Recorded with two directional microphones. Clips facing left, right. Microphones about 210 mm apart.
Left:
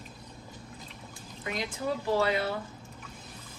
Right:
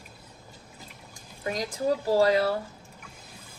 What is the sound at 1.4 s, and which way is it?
A woman's voice, 40° right (ahead or behind).